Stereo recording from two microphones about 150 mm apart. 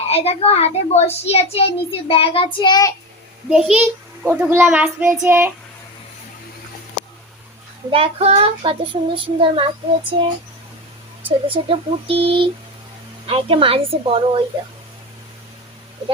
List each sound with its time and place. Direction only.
0.1 s a child's voice: 40° left (ahead or behind)
3.5 s a child's voice: 5° right (ahead or behind)
7.9 s child singing: 40° right (ahead or behind)
11.4 s child singing: 35° right (ahead or behind)